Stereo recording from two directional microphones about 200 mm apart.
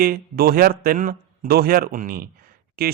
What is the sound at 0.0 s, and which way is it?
Speech, 50° right (ahead or behind).